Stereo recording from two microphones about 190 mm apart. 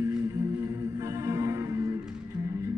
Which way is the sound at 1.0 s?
15° right (ahead or behind).